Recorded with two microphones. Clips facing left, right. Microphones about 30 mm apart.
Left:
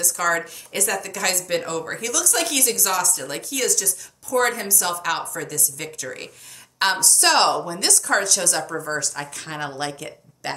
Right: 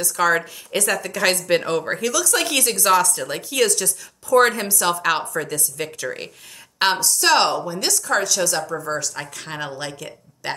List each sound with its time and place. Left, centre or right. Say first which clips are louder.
0.0 s a woman's voice: right 3 dB; centre
1.3 s speech: right 5 dB; right
1.9 s speech: right 4 dB; centre
2.7 s a woman's voice: right 6 dB; right
3.2 s speech: right 3 dB; centre
3.5 s a woman's voice: right 5 dB; right
6.8 s a woman's voice: right 1 dB; centre
8.8 s speech: right 1 dB; centre
9.1 s speech: even; centre
9.7 s a woman's voice: left 1 dB; centre